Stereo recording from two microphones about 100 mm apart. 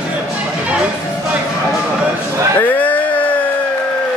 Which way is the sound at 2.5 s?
20° left (ahead or behind).